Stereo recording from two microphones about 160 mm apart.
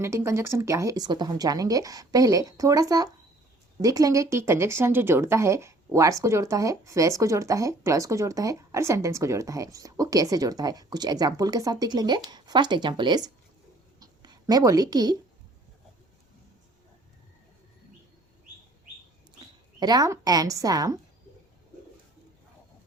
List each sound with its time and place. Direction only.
0.0 s speech: 15° right (ahead or behind)
14.0 s writing: 25° right (ahead or behind)
19.8 s speech: 25° right (ahead or behind)